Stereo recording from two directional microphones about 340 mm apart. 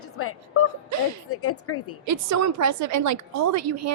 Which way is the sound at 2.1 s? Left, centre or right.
Right.